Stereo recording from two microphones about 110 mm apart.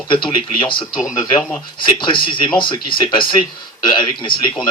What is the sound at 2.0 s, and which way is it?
Speech, 45° left (ahead or behind).